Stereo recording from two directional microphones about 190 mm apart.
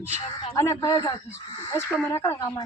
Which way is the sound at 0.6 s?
15° left (ahead or behind).